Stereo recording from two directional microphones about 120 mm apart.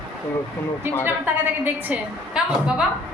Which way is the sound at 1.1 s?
15° right (ahead or behind).